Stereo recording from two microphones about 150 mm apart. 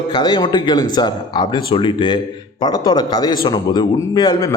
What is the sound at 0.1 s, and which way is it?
Speech, 30° left (ahead or behind).